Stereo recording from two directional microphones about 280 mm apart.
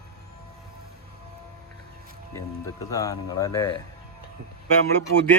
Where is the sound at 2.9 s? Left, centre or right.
Centre.